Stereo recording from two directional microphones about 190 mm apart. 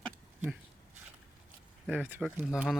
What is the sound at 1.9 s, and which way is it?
Speech, 10° right (ahead or behind).